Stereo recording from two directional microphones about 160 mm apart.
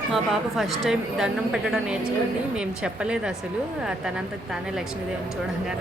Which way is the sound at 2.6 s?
5° right (ahead or behind).